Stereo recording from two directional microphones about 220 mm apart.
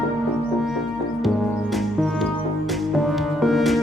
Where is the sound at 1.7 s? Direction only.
Centre (ahead or behind).